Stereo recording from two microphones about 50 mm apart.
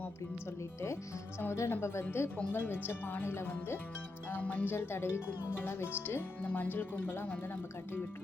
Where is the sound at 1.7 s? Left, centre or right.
Left.